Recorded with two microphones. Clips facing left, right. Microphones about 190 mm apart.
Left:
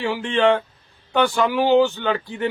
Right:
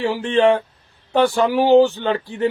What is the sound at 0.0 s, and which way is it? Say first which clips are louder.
Speech: right 3 dB; 35° right (ahead or behind).